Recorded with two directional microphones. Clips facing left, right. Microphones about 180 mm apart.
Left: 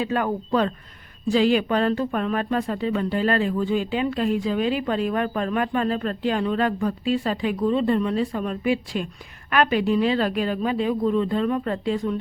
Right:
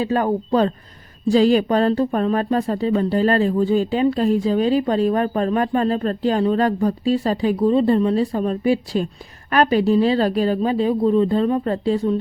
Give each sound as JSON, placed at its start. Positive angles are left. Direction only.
{"t": 0.0, "sound": "speech", "side_deg": -35}